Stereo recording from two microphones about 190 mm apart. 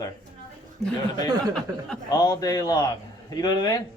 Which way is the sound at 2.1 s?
20° left (ahead or behind).